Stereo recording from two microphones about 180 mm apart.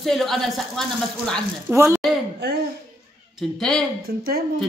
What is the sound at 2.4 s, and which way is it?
Speech, 65° right (ahead or behind).